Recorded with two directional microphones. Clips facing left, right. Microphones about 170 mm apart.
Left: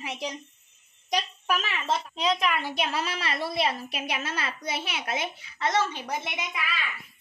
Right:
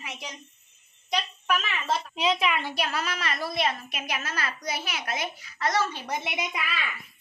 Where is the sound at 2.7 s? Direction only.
25° left (ahead or behind).